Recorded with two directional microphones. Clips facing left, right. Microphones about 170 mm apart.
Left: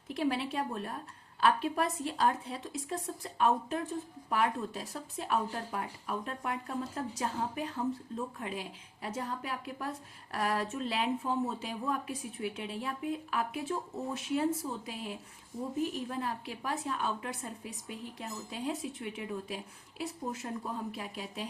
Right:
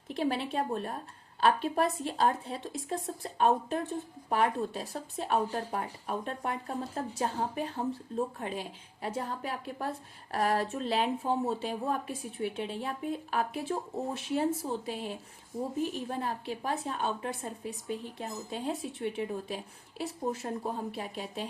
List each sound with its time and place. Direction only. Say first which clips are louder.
0.1 s speech: right 1 dB; 25° right (ahead or behind)